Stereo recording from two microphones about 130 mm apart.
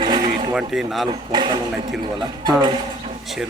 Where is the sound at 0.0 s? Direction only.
35° right (ahead or behind).